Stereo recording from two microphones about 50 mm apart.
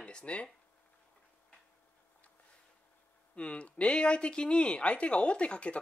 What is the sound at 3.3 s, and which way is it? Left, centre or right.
Speech, left.